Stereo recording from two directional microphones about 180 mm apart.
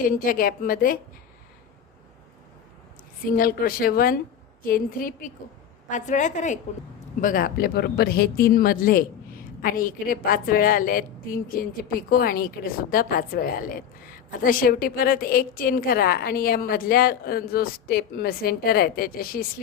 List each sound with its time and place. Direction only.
0.0 s speech: 50° left (ahead or behind)
3.3 s a woman's voice: 50° left (ahead or behind)